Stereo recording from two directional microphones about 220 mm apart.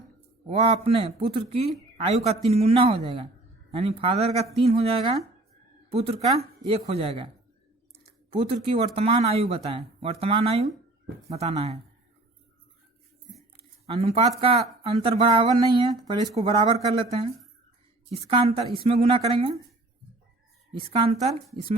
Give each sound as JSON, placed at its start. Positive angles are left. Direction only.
{"t": 0.4, "sound": "speech", "side_deg": -25}
{"t": 8.3, "sound": "speech", "side_deg": -25}
{"t": 13.9, "sound": "speech", "side_deg": -25}
{"t": 20.7, "sound": "speech", "side_deg": -25}